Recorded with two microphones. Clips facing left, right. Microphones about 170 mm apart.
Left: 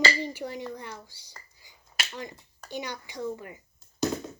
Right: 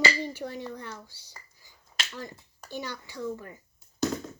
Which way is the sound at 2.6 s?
15° left (ahead or behind).